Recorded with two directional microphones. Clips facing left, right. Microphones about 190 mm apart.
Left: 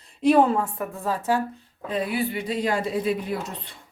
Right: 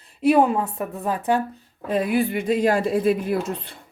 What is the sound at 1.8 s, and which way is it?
Speech, 50° right (ahead or behind).